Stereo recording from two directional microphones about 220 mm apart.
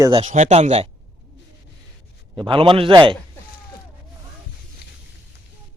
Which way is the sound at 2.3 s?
20° right (ahead or behind).